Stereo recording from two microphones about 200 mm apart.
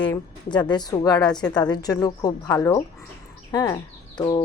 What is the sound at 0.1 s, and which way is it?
A woman's voice, 20° left (ahead or behind).